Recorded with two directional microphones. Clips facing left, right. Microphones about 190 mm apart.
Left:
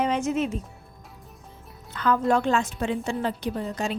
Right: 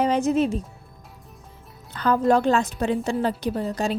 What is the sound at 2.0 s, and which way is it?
A woman's voice, 35° right (ahead or behind).